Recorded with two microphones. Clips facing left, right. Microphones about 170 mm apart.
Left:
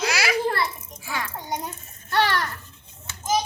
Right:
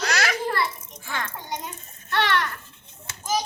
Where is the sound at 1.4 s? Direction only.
35° left (ahead or behind).